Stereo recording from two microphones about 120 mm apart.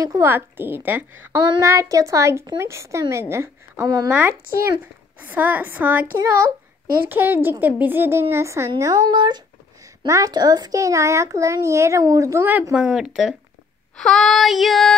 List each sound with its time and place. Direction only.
0.0 s a woman's voice: 25° right (ahead or behind)
4.1 s a woman's voice: 15° right (ahead or behind)
7.1 s a woman's voice: 15° right (ahead or behind)
12.7 s child singing: 5° right (ahead or behind)
13.9 s child singing: 5° left (ahead or behind)